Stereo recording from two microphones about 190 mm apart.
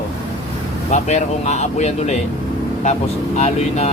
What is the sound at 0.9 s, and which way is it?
Speech, 35° left (ahead or behind).